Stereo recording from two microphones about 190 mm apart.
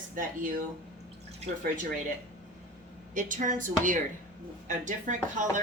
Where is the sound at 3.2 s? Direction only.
45° right (ahead or behind).